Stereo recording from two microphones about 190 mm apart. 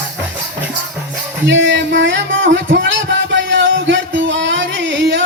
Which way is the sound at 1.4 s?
75° right (ahead or behind).